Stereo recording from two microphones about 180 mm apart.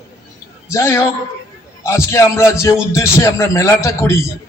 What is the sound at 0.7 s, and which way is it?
A man's voice, 15° left (ahead or behind).